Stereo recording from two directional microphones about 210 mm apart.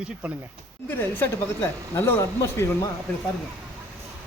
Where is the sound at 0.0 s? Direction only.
5° right (ahead or behind).